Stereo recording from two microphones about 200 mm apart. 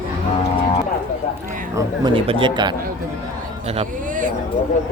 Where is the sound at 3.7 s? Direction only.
35° right (ahead or behind).